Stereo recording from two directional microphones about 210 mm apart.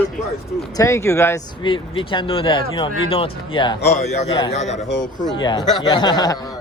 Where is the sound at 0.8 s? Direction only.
15° left (ahead or behind).